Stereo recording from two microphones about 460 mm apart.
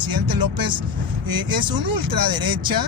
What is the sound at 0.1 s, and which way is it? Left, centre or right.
Speech, right.